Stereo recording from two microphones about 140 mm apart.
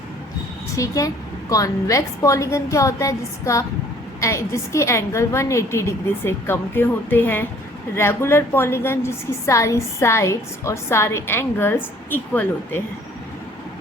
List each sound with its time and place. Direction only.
0.8 s a woman's voice: 25° left (ahead or behind)